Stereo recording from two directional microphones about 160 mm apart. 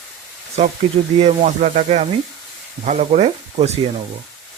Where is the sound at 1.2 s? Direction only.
50° right (ahead or behind).